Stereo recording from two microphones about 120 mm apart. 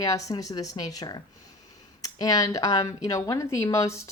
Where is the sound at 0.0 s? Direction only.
30° left (ahead or behind).